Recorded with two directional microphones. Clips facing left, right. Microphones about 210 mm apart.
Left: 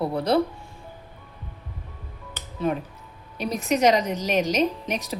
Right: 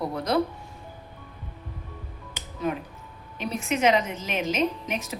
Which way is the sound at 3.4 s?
40° left (ahead or behind).